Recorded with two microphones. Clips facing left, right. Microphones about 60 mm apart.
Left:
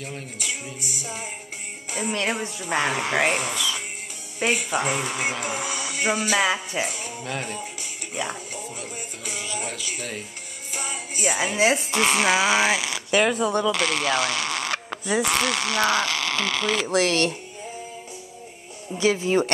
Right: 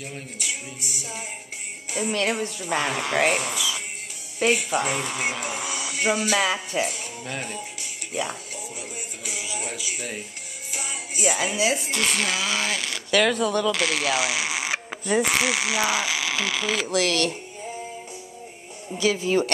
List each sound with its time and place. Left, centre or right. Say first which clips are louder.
0.0 s music: left 1 dB; centre
1.9 s speech: right 1 dB; centre
3.3 s music: even; centre
4.4 s speech: right 1 dB; centre
10.7 s music: left 2 dB; centre
11.5 s speech: left 3 dB; left
12.0 s speech: left 9 dB; centre
13.1 s speech: even; left
13.7 s a sound: left 1 dB; centre
15.2 s speech: even; centre
16.8 s speech: left 2 dB; left
18.9 s speech: left 1 dB; left